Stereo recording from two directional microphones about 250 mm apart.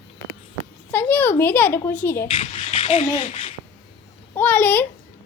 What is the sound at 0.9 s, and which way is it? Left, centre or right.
A woman's voice, centre.